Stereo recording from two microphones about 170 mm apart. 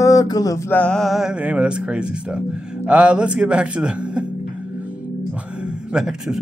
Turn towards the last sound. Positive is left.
turn(degrees=-5)  # may be behind; listen again after turning